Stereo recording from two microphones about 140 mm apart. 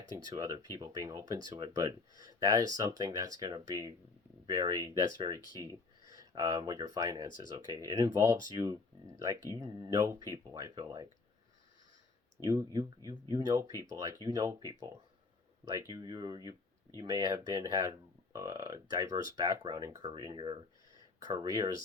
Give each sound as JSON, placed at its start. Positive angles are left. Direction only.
{"t": 0.2, "sound": "speech", "side_deg": -25}
{"t": 12.4, "sound": "speech", "side_deg": -25}